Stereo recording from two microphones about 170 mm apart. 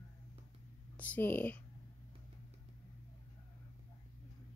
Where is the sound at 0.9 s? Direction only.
10° left (ahead or behind).